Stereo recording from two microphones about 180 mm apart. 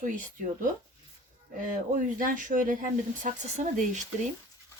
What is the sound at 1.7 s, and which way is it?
Speech, 50° right (ahead or behind).